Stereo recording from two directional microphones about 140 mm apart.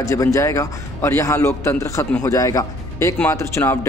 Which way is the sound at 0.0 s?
20° left (ahead or behind).